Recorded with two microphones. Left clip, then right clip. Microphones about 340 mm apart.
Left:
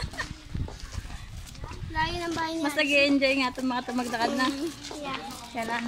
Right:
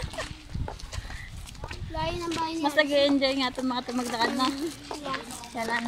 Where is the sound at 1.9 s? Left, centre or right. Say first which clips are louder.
Left 2 dB; centre.